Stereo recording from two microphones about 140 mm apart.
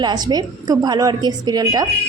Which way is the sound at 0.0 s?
30° right (ahead or behind).